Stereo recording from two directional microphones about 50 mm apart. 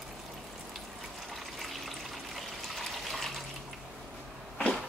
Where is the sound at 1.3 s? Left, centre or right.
Centre.